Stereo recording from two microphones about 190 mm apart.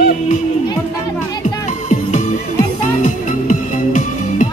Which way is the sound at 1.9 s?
40° left (ahead or behind).